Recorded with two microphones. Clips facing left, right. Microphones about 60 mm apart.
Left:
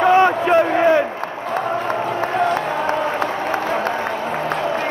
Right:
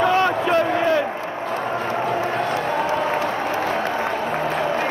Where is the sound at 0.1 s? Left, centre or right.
Left.